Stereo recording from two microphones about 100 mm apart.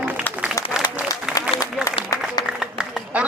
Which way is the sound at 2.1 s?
35° left (ahead or behind).